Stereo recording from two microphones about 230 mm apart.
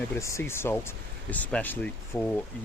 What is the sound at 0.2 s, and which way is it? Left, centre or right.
Speech, centre.